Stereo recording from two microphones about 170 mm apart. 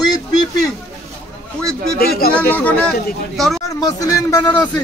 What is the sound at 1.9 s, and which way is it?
Speech, 60° left (ahead or behind).